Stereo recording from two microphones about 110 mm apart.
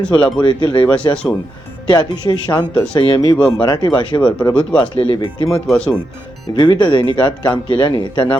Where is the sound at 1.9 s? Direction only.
40° left (ahead or behind).